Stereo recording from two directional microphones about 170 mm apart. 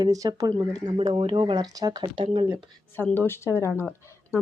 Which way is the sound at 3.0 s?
10° left (ahead or behind).